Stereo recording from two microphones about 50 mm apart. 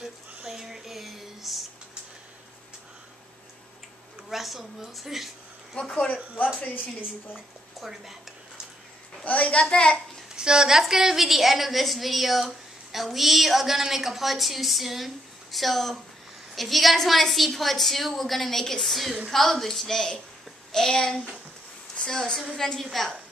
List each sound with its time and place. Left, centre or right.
0.5 s a sound: centre
4.3 s a woman's voice: centre
5.8 s a child's voice: left
6.7 s a woman's voice: left
7.8 s speech: centre
9.2 s a child's voice: left
10.3 s a woman's voice: centre
22.8 s a woman's voice: centre